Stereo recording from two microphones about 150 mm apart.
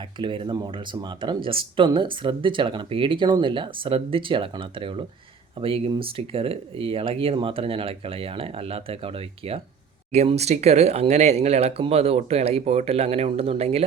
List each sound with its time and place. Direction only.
0.2 s speech: 35° right (ahead or behind)